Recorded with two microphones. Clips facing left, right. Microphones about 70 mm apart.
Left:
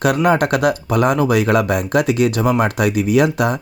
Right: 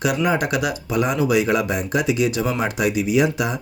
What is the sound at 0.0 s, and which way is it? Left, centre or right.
Speech, left.